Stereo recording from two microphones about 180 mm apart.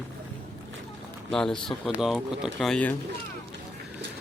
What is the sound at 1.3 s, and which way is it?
Speech, 5° left (ahead or behind).